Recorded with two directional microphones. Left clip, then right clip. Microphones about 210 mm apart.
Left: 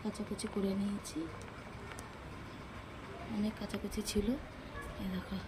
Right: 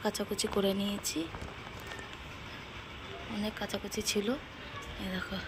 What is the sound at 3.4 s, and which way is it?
Speech, 5° left (ahead or behind).